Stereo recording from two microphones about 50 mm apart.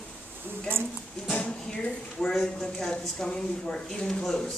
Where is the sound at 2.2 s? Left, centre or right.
Centre.